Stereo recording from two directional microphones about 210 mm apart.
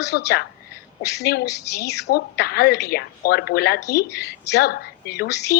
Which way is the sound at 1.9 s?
50° left (ahead or behind).